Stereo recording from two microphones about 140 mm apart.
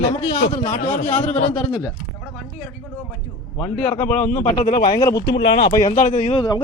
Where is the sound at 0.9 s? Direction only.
60° left (ahead or behind).